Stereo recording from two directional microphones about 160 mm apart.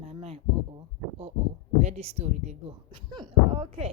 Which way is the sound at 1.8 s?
45° right (ahead or behind).